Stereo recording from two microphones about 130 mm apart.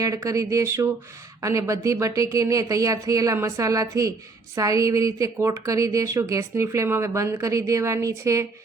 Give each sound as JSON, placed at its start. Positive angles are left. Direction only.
{"t": 0.0, "sound": "a woman's voice", "side_deg": -25}